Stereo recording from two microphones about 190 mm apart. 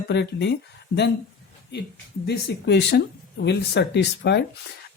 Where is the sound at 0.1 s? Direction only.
65° left (ahead or behind).